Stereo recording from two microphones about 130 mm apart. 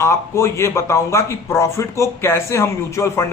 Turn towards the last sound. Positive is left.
turn(degrees=20)  # may be behind; listen again after turning